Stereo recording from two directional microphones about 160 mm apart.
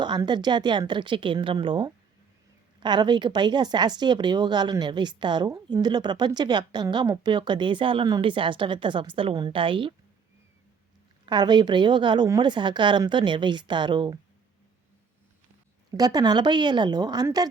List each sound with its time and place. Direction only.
0.0 s a woman's voice: 25° right (ahead or behind)
11.3 s a woman's voice: 25° right (ahead or behind)
16.0 s a woman's voice: 25° right (ahead or behind)